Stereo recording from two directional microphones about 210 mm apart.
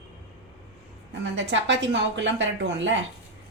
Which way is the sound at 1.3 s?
60° right (ahead or behind).